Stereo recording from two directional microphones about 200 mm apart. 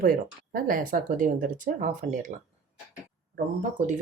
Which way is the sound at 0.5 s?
45° right (ahead or behind).